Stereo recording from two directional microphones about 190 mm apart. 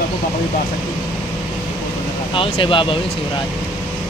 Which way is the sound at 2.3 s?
25° left (ahead or behind).